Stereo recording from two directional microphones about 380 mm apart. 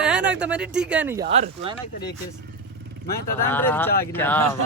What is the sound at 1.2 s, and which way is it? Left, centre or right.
Speech, centre.